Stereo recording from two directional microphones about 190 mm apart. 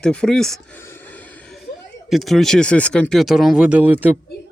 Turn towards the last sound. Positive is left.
turn(degrees=-10)  # may be behind; listen again after turning